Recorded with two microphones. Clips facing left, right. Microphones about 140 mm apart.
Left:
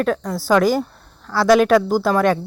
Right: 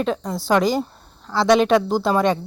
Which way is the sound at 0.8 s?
20° right (ahead or behind).